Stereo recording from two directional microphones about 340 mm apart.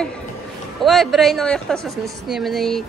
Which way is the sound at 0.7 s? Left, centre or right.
Centre.